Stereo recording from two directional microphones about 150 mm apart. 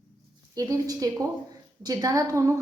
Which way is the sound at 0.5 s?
25° right (ahead or behind).